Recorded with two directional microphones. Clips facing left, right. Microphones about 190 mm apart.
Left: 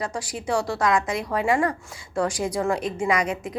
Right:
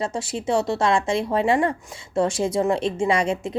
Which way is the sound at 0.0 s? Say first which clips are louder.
Right 4 dB; 25° right (ahead or behind).